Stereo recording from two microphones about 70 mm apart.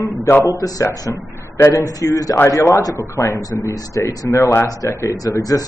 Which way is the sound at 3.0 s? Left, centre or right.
Left.